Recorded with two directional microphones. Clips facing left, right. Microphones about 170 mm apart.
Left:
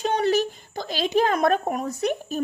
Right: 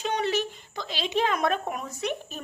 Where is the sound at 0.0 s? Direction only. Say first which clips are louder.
Left 5 dB; 40° left (ahead or behind).